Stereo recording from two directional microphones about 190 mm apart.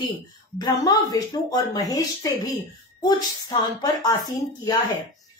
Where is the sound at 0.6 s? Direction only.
20° left (ahead or behind).